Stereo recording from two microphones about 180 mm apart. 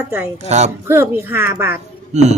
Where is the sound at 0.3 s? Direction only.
40° right (ahead or behind).